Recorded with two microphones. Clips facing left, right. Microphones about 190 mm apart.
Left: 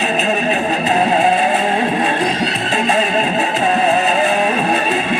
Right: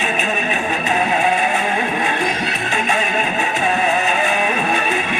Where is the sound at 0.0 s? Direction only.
35° left (ahead or behind).